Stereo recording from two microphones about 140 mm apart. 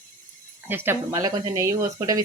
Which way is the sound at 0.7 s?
15° right (ahead or behind).